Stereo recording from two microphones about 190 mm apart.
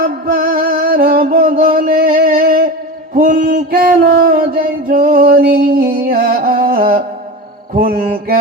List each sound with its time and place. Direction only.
0.0 s music: 50° right (ahead or behind)
2.4 s a sound: 50° right (ahead or behind)
7.8 s mantra: 55° right (ahead or behind)